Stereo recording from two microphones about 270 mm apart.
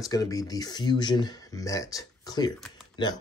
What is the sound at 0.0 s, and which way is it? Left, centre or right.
Speech, centre.